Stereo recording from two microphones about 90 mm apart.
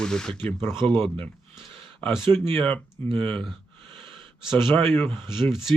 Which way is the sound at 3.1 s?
90° right.